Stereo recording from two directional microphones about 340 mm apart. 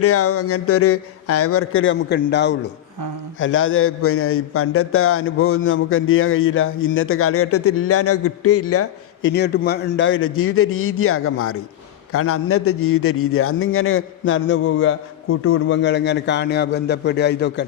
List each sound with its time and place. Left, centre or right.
0.0 s a man's voice: left
9.3 s a man's voice: left